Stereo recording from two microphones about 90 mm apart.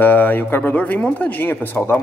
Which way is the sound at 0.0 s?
20° left (ahead or behind).